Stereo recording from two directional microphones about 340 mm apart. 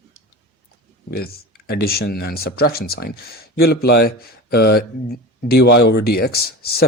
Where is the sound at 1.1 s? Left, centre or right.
Left.